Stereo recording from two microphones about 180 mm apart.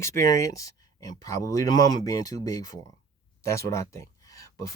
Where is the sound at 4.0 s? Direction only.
20° left (ahead or behind).